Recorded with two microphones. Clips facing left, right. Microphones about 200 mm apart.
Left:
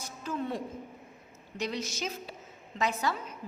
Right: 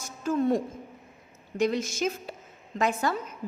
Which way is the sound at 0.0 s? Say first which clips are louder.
Right 9 dB; 45° right (ahead or behind).